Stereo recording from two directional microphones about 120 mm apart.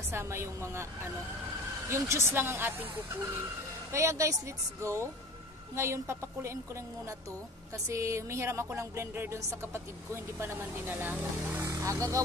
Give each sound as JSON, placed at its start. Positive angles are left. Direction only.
{"t": 0.1, "sound": "music", "side_deg": -20}
{"t": 1.9, "sound": "music", "side_deg": -25}
{"t": 11.7, "sound": "speech", "side_deg": -25}